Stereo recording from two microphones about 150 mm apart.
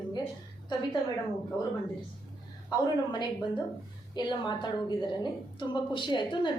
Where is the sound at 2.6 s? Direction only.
30° left (ahead or behind).